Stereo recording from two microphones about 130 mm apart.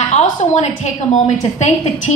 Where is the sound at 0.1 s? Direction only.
65° left (ahead or behind).